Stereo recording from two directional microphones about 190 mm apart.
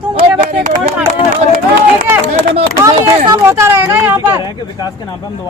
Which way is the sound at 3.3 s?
15° right (ahead or behind).